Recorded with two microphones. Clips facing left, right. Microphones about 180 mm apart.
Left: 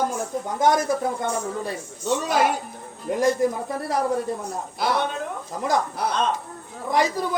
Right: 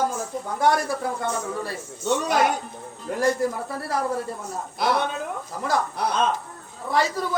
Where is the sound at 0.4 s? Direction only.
20° left (ahead or behind).